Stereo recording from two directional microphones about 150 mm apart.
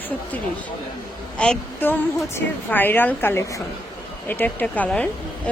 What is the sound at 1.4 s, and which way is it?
Speech, 10° left (ahead or behind).